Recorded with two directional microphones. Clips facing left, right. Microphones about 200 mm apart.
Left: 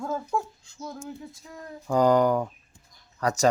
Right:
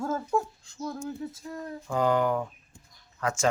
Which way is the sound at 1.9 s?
40° left (ahead or behind).